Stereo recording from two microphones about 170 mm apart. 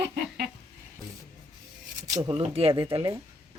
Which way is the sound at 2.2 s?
30° right (ahead or behind).